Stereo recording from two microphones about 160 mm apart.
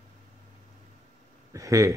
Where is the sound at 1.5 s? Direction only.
20° right (ahead or behind).